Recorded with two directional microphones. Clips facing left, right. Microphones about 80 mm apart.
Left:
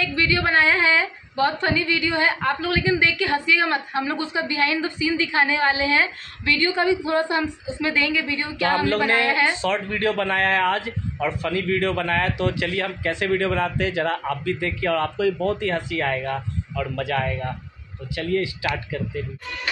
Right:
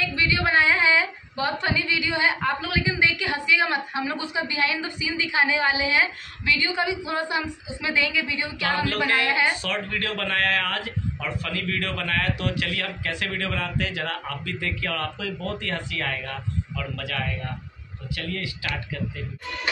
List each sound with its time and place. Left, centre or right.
0.0 s a woman's voice: centre
8.9 s speech: left